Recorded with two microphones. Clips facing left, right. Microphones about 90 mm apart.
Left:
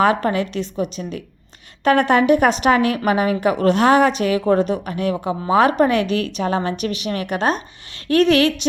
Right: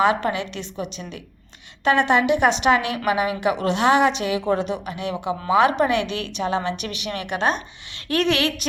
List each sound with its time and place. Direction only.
0.0 s a woman's voice: 40° left (ahead or behind)